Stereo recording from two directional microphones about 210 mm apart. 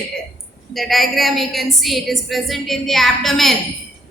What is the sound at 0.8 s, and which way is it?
A woman's voice, centre (ahead or behind).